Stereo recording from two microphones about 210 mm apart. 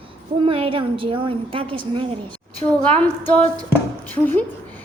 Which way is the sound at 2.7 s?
5° left (ahead or behind).